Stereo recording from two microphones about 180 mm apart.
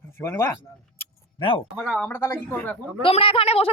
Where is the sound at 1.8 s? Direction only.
5° right (ahead or behind).